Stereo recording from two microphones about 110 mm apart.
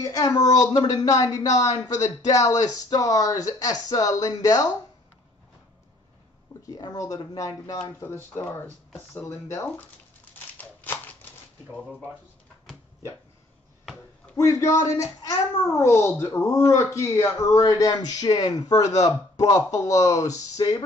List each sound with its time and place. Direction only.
0.0 s speech: 30° left (ahead or behind)
6.6 s speech: 35° left (ahead or behind)
8.0 s a child's voice: 20° left (ahead or behind)
10.6 s a sound: 15° left (ahead or behind)
14.3 s a child's voice: 30° left (ahead or behind)